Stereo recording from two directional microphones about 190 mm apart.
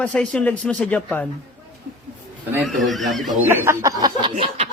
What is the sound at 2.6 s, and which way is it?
Speech, centre (ahead or behind).